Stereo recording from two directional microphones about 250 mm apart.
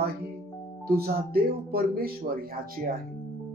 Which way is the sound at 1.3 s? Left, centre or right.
Right.